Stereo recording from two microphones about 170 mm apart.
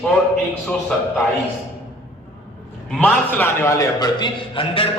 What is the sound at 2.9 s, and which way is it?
A man's voice, 10° left (ahead or behind).